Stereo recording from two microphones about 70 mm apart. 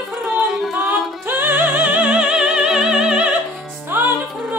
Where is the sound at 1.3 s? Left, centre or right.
Right.